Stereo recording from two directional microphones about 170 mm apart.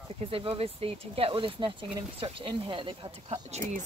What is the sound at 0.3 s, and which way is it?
Speech, 35° right (ahead or behind).